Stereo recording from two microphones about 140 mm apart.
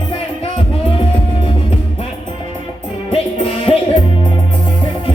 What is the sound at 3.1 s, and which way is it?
Music, 45° left (ahead or behind).